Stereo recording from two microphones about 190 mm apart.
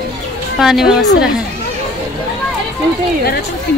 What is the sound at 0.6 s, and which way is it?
Speech, centre (ahead or behind).